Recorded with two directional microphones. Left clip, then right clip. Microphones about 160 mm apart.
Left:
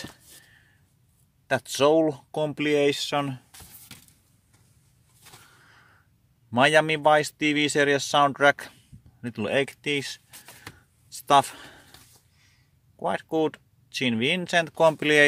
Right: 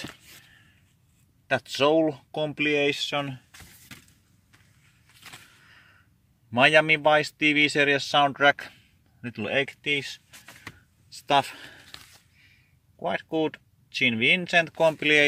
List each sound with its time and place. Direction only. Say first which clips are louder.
1.5 s speech: left 1 dB; 15° left (ahead or behind)
6.5 s speech: right 1 dB; 10° left (ahead or behind)
11.1 s a sound: left 3 dB; 15° left (ahead or behind)
13.0 s speech: left 2 dB; 15° left (ahead or behind)